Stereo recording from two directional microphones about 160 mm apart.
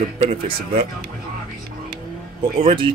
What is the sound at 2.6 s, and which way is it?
Speech, 35° right (ahead or behind).